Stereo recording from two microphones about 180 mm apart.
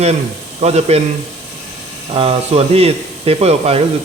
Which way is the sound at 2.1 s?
35° right (ahead or behind).